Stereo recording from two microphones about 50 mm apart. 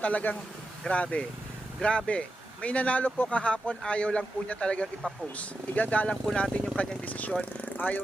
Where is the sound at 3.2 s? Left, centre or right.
Left.